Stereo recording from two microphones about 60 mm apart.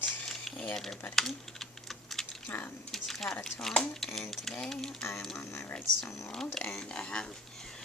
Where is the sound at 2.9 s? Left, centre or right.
Centre.